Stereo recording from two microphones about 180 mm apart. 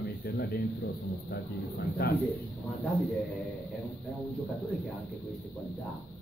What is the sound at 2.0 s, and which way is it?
Speech, 60° left (ahead or behind).